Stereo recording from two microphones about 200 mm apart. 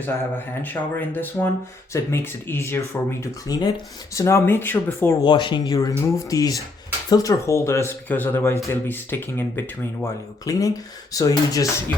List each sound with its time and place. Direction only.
0.3 s speech: 10° left (ahead or behind)
5.2 s speech: 25° left (ahead or behind)